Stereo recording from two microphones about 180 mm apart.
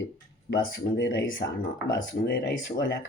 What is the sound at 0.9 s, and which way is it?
Speech, 90° left.